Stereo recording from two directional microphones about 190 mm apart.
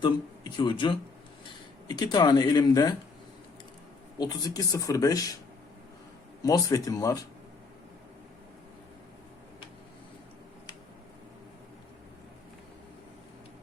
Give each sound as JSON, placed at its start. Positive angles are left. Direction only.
{"t": 0.0, "sound": "speech", "side_deg": 25}
{"t": 4.2, "sound": "speech", "side_deg": 20}
{"t": 6.4, "sound": "speech", "side_deg": 20}